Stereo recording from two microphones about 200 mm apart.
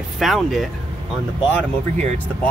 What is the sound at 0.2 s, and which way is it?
Speech, centre (ahead or behind).